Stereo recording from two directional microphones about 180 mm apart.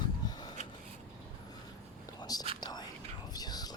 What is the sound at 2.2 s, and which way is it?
Whispering, 20° left (ahead or behind).